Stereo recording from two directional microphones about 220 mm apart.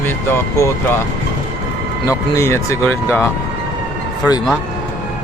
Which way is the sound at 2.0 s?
15° left (ahead or behind).